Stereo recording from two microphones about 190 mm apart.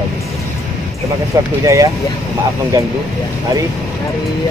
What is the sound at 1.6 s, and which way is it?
Speech, 15° right (ahead or behind).